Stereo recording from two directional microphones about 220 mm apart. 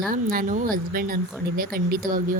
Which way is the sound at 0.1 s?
40° right (ahead or behind).